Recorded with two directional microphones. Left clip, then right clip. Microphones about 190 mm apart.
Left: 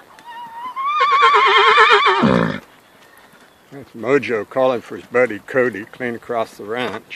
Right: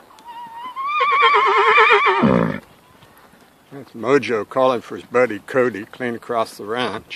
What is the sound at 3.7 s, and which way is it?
Speech, 10° right (ahead or behind).